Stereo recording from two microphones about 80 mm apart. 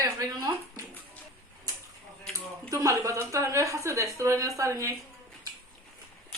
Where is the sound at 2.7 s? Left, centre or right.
Right.